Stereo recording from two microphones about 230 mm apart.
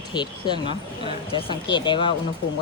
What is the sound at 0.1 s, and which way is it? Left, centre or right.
Speech, centre.